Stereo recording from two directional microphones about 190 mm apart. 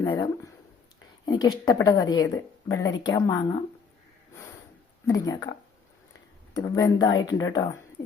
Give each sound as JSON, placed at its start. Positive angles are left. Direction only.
{"t": 0.0, "sound": "speech", "side_deg": 20}
{"t": 5.0, "sound": "speech", "side_deg": 20}